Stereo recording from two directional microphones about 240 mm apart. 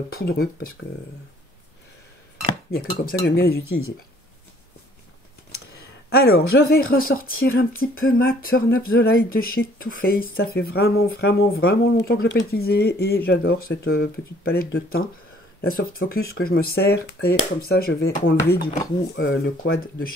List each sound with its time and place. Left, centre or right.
0.1 s speech: left
2.7 s speech: left
6.0 s speech: left
19.1 s speech: left